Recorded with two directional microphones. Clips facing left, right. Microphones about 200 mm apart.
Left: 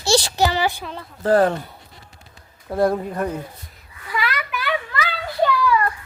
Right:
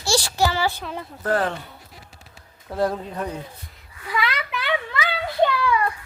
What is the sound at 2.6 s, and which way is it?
Speech, 10° left (ahead or behind).